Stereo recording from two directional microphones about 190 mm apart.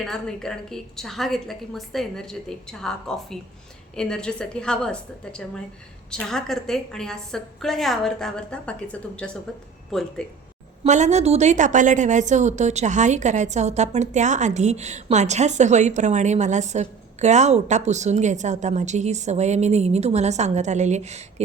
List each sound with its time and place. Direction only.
0.0 s a woman's voice: centre (ahead or behind)
10.8 s a woman's voice: 40° right (ahead or behind)